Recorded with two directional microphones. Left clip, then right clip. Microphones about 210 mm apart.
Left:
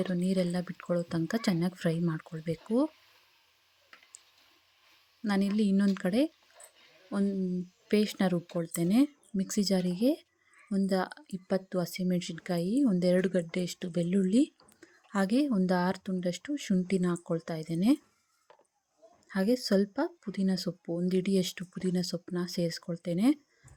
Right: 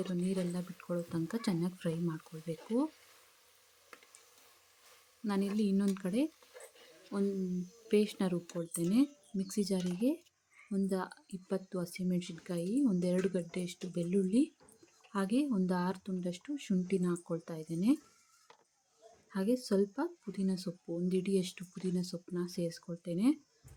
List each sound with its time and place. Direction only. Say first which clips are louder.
0.0 s speech: left 6 dB; 25° left (ahead or behind)
5.2 s speech: left 4 dB; 25° left (ahead or behind)
19.3 s speech: left 5 dB; 25° left (ahead or behind)